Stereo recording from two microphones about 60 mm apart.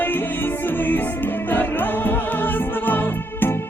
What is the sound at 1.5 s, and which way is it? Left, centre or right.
Music, left.